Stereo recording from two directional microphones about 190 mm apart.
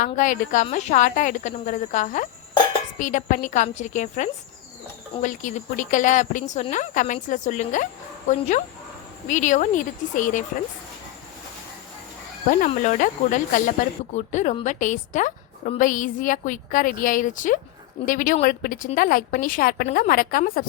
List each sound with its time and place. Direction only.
0.0 s speech: 45° left (ahead or behind)
12.5 s a woman's voice: 40° left (ahead or behind)